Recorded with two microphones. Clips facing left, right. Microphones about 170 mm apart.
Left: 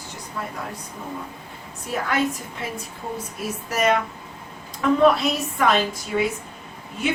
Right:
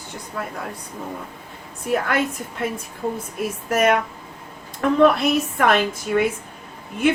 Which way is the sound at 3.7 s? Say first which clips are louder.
Right 3 dB; 55° right (ahead or behind).